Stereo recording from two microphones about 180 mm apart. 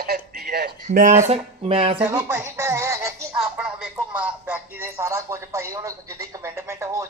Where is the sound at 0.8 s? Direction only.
40° right (ahead or behind).